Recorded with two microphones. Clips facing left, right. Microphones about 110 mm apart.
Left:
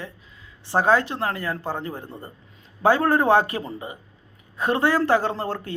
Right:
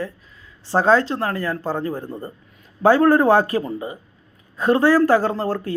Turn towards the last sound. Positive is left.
turn(degrees=20)  # may be behind; listen again after turning